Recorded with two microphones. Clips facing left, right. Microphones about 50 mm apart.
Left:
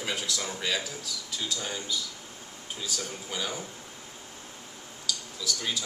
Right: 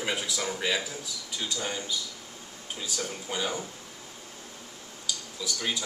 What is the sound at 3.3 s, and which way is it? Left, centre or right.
Speech, centre.